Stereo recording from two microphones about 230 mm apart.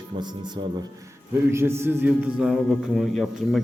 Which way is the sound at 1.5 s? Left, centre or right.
Centre.